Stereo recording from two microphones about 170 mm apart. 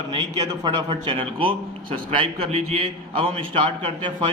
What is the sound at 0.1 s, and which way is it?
A man's voice, 25° right (ahead or behind).